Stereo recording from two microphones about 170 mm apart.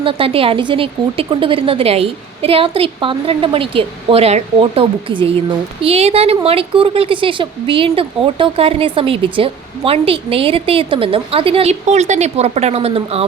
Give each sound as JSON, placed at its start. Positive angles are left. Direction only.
{"t": 0.0, "sound": "a woman's voice", "side_deg": -30}